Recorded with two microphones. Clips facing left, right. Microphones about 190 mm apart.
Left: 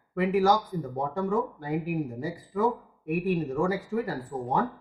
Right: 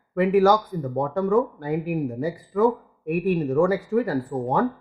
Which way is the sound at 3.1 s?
65° right (ahead or behind).